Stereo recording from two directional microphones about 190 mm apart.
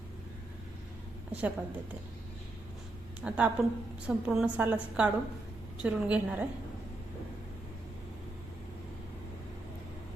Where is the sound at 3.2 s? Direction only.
5° right (ahead or behind).